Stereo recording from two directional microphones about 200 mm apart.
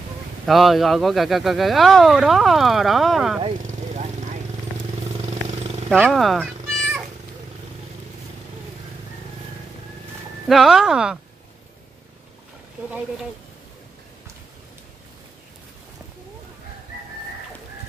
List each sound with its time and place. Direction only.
0.5 s speech: centre (ahead or behind)
3.9 s vehicle: 35° right (ahead or behind)
5.9 s cat: centre (ahead or behind)
10.5 s speech: centre (ahead or behind)